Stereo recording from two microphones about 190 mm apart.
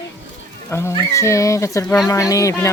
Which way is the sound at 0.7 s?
15° left (ahead or behind).